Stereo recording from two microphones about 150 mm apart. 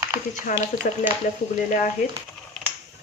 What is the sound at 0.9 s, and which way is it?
Speech, 75° left (ahead or behind).